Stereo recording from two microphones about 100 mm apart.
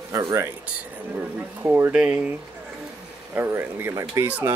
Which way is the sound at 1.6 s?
20° right (ahead or behind).